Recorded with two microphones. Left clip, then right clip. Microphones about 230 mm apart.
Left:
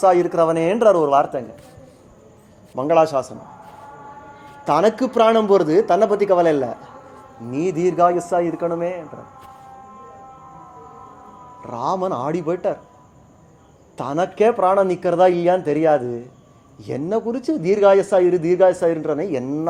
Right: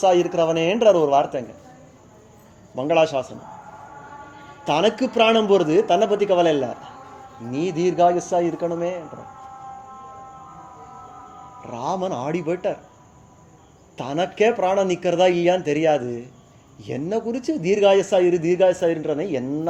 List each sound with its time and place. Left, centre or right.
0.1 s speech: left
0.7 s speech: left
2.7 s speech: left
4.6 s speech: left
8.3 s speech: centre
11.6 s speech: left
13.9 s speech: left